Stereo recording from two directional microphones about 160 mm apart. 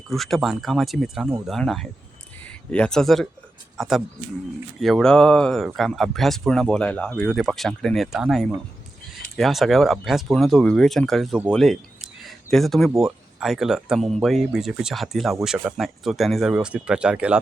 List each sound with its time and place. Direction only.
0.1 s a man's voice: centre (ahead or behind)
12.2 s a sound: centre (ahead or behind)
13.0 s speech: centre (ahead or behind)